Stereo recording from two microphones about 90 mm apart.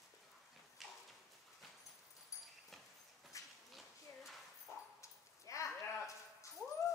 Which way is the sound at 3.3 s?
35° left (ahead or behind).